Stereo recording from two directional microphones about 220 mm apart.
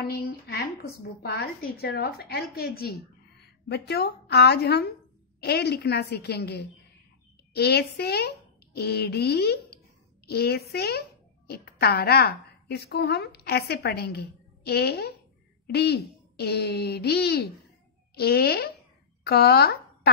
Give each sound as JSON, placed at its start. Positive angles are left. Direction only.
{"t": 0.0, "sound": "a child's voice", "side_deg": 45}